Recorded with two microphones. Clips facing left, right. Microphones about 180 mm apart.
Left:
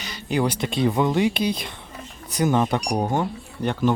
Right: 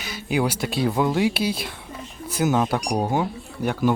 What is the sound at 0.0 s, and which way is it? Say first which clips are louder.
Speech: even; 10° right (ahead or behind).